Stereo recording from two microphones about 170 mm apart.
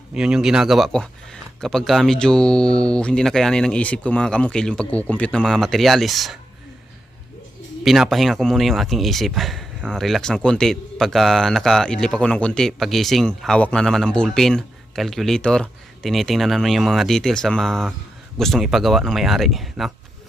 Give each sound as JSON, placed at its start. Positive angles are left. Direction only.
{"t": 0.1, "sound": "speech", "side_deg": -5}
{"t": 7.9, "sound": "speech", "side_deg": 0}